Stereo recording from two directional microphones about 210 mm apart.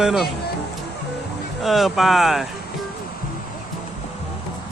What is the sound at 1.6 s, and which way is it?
Speech, centre (ahead or behind).